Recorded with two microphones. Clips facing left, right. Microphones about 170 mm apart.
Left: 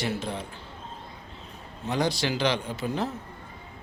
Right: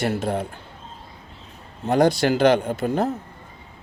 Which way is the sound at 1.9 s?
55° right (ahead or behind).